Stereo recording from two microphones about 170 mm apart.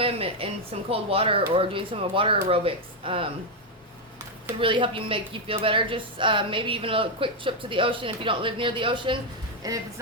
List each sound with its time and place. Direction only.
0.0 s a woman's voice: 35° right (ahead or behind)
4.6 s a woman's voice: 30° right (ahead or behind)